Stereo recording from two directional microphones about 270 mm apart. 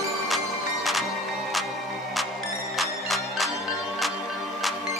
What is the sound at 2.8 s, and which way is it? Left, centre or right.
Music, centre.